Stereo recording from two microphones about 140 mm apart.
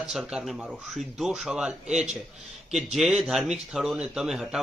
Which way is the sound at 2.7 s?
5° right (ahead or behind).